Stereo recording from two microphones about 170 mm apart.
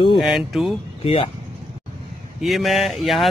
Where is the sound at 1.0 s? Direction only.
35° left (ahead or behind).